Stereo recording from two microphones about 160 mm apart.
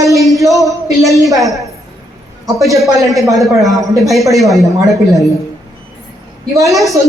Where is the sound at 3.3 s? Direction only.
Centre (ahead or behind).